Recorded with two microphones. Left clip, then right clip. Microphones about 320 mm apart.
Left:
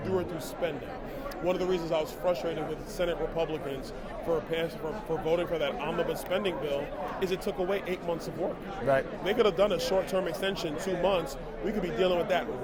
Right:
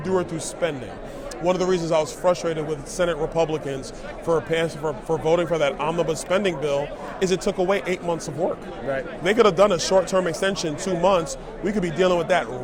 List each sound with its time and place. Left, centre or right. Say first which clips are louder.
0.0 s a man's voice: right 7 dB; right
9.2 s a man's voice: right 11 dB; right